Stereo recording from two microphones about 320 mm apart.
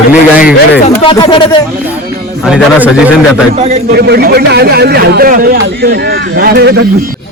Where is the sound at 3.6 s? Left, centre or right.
Right.